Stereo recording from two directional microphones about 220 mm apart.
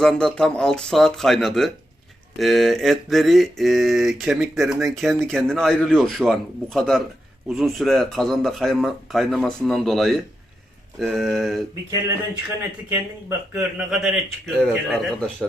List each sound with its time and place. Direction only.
0.0 s mantra: centre (ahead or behind)
12.9 s speech: 10° right (ahead or behind)
14.7 s mantra: centre (ahead or behind)